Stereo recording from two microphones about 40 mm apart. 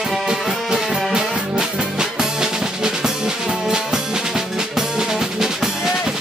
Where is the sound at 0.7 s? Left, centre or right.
Centre.